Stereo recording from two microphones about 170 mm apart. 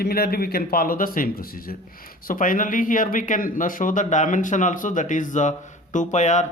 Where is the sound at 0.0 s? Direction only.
65° left (ahead or behind).